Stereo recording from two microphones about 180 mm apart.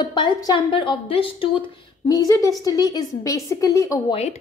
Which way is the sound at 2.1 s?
20° left (ahead or behind).